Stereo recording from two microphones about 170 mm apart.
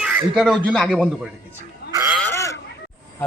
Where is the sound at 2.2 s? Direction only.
15° left (ahead or behind).